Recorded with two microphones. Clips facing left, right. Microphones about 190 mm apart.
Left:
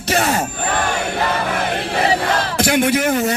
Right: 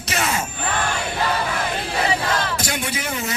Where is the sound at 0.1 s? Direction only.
35° left (ahead or behind).